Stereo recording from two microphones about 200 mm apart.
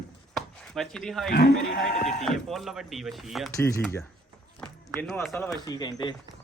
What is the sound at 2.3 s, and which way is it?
Speech, centre (ahead or behind).